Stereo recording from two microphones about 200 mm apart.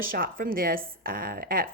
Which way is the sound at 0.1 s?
45° right (ahead or behind).